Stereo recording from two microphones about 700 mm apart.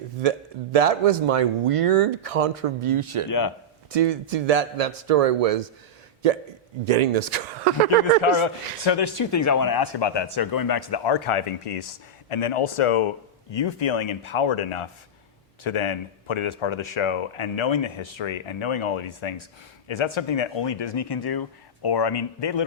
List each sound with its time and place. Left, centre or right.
0.2 s speech: right
3.2 s speech: left
3.9 s a man's voice: right
8.2 s speech: left
8.9 s speech: left